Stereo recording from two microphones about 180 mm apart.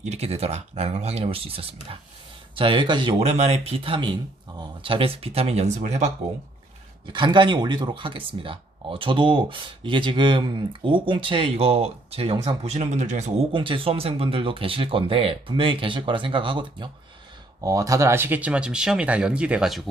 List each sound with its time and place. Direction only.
0.0 s speech: 35° right (ahead or behind)
7.1 s speech: 25° right (ahead or behind)
13.5 s speech: 25° right (ahead or behind); by 19.9 s centre (ahead or behind)